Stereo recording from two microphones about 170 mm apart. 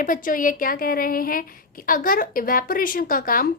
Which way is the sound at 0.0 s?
50° left (ahead or behind).